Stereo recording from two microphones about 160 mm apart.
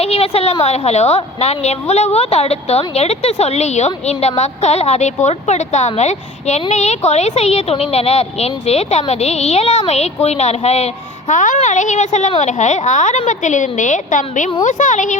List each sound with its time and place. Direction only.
0.0 s a woman's voice: 40° left (ahead or behind)